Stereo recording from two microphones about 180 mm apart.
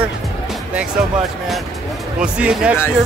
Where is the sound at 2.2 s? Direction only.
5° right (ahead or behind).